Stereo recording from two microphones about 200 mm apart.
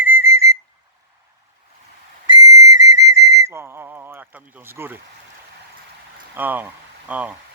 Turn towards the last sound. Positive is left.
turn(degrees=-10)  # may be behind; listen again after turning